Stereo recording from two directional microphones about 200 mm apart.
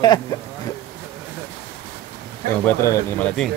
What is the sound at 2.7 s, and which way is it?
Speech, 10° left (ahead or behind).